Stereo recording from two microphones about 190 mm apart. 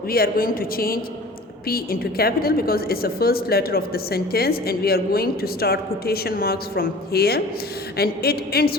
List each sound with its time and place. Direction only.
0.1 s a woman's voice: 50° left (ahead or behind)